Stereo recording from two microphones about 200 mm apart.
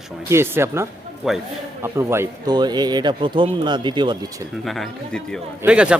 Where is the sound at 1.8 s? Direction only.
15° right (ahead or behind).